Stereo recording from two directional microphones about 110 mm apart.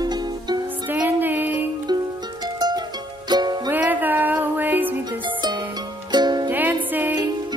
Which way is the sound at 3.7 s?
15° right (ahead or behind).